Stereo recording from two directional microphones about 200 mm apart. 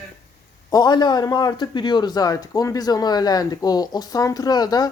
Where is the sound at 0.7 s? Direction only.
20° left (ahead or behind).